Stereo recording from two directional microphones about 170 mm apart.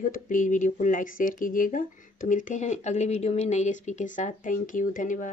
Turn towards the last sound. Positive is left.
turn(degrees=50)  # may be behind; listen again after turning